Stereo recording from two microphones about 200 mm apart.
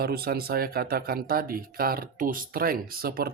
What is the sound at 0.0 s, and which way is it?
Speech, 50° right (ahead or behind).